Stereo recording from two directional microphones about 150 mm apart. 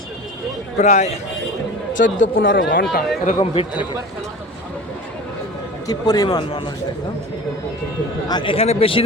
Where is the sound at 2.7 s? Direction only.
75° left (ahead or behind).